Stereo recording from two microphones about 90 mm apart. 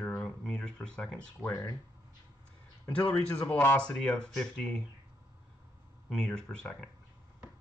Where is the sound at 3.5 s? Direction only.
25° left (ahead or behind).